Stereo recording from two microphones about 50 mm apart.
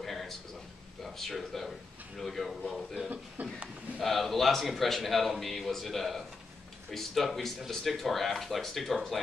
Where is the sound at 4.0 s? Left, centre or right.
Centre.